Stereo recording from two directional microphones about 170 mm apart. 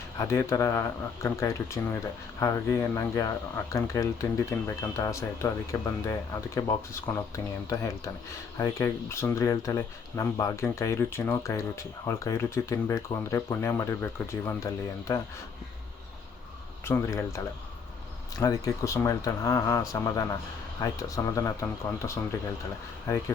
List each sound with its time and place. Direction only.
0.2 s speech: 15° left (ahead or behind)
16.8 s speech: 15° left (ahead or behind)